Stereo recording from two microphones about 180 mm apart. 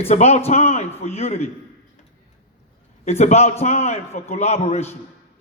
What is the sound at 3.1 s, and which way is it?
A man's voice, 35° left (ahead or behind).